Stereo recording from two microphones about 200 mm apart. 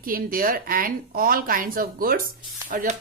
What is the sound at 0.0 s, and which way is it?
A woman's voice, 45° right (ahead or behind).